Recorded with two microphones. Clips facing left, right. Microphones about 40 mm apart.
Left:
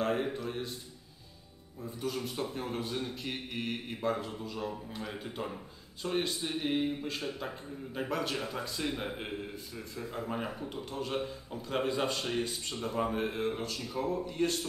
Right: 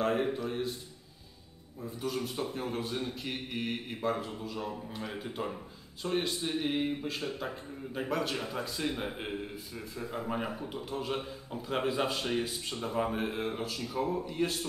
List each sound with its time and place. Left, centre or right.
0.0 s a man's voice: centre
1.8 s a man's voice: centre